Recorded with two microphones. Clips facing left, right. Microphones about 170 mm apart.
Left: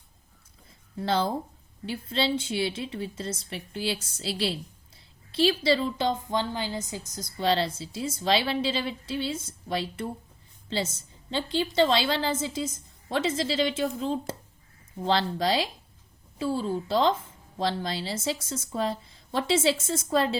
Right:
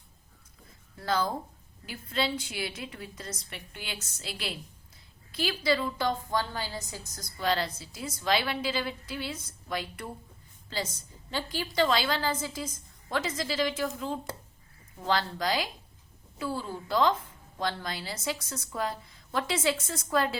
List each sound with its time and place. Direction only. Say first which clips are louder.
0.9 s a woman's voice: left 3 dB; 30° left (ahead or behind)